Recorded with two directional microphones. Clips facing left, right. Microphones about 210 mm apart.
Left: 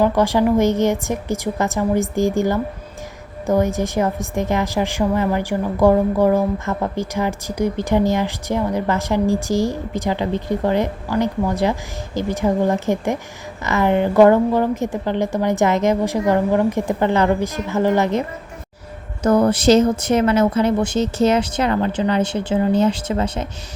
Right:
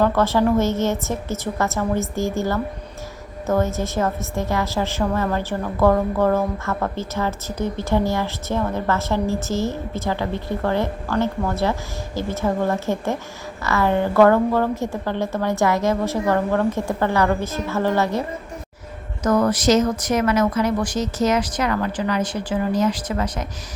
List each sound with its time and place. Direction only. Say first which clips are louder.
0.0 s a woman's voice: left 2 dB; 15° left (ahead or behind)
19.2 s speech: left 3 dB; 30° left (ahead or behind)